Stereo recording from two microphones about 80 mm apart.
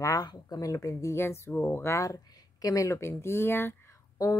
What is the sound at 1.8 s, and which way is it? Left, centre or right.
Speech, left.